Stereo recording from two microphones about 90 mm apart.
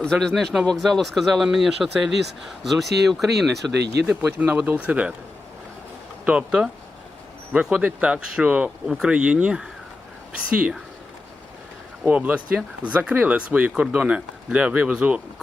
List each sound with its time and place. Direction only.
0.0 s speech: 5° left (ahead or behind)
4.2 s speech: 20° right (ahead or behind)
6.2 s speech: 10° right (ahead or behind)
12.0 s speech: 15° right (ahead or behind)